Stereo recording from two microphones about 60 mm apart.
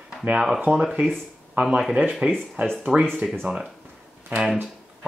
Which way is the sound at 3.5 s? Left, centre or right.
Right.